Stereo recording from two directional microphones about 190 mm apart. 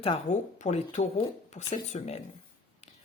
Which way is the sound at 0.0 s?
35° left (ahead or behind).